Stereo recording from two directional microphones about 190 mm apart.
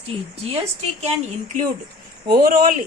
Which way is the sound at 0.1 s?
30° right (ahead or behind).